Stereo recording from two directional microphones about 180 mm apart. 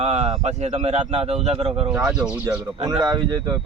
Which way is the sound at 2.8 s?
25° right (ahead or behind).